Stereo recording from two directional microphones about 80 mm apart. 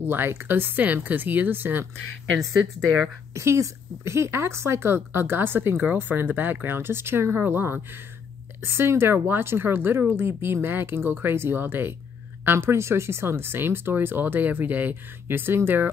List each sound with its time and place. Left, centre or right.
0.0 s speech: right
2.3 s speech: centre
3.3 s speech: right